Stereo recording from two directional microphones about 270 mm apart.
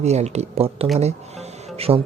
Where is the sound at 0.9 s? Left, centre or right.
Right.